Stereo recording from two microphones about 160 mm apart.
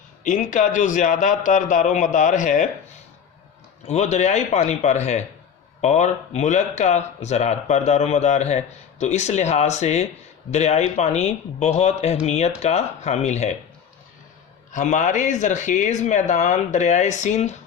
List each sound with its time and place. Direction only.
0.3 s speech: 50° left (ahead or behind)
3.8 s speech: 45° left (ahead or behind)
14.7 s speech: 50° left (ahead or behind)